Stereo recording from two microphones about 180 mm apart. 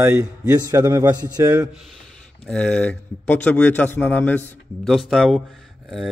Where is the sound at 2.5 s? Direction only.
5° left (ahead or behind).